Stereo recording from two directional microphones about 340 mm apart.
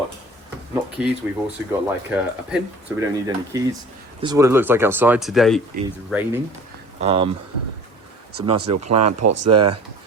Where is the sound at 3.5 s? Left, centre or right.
Centre.